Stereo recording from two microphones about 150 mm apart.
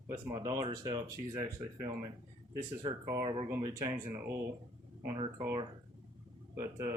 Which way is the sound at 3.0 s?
20° right (ahead or behind).